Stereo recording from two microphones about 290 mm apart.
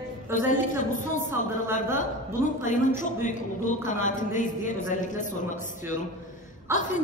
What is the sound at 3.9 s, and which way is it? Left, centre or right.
A woman's voice, left.